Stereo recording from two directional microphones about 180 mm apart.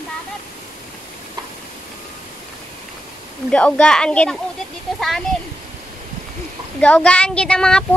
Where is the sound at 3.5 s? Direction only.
5° left (ahead or behind).